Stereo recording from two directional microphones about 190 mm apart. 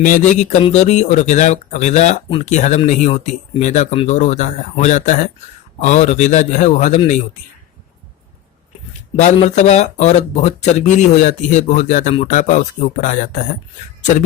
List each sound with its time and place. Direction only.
0.0 s speech: 40° left (ahead or behind)
9.1 s speech: 40° left (ahead or behind)